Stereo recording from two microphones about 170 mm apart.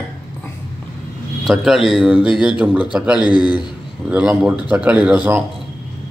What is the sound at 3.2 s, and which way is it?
Speech, 25° left (ahead or behind).